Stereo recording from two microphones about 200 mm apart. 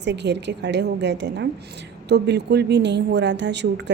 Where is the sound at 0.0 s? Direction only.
60° right (ahead or behind).